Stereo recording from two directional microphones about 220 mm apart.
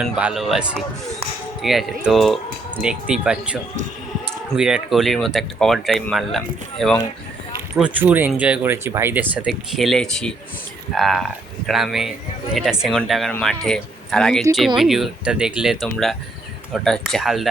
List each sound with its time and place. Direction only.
0.0 s speech: 5° right (ahead or behind)